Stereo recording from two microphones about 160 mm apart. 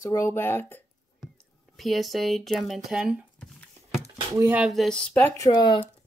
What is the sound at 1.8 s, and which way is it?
Speech, centre (ahead or behind).